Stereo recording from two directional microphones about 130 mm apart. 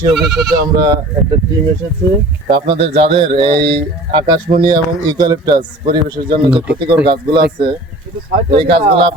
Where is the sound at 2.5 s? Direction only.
45° right (ahead or behind).